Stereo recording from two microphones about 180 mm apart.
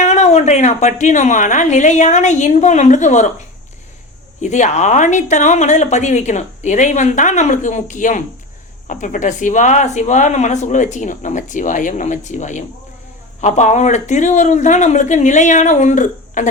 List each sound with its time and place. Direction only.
0.0 s a woman's voice: 40° left (ahead or behind)
4.4 s a woman's voice: 40° left (ahead or behind)